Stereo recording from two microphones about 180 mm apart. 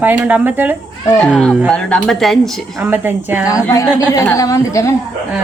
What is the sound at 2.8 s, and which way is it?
Speech, 10° right (ahead or behind).